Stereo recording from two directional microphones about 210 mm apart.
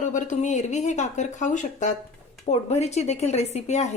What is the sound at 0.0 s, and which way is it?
A woman's voice, 35° left (ahead or behind).